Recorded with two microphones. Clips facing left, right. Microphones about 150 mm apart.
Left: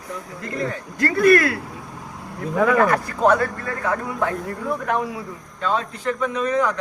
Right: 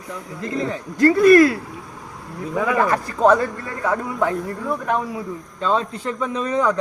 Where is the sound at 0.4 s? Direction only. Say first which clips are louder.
Right 3 dB; 20° right (ahead or behind).